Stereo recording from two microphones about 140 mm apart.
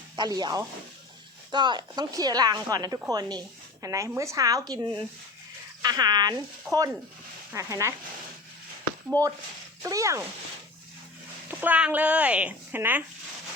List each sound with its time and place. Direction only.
0.2 s a woman's voice: 30° right (ahead or behind)
9.8 s a woman's voice: 20° right (ahead or behind)
11.4 s speech: 10° right (ahead or behind)